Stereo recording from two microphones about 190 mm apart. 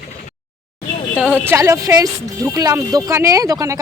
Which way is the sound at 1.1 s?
10° right (ahead or behind).